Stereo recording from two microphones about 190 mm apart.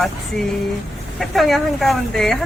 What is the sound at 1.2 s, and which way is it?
Speech, centre (ahead or behind).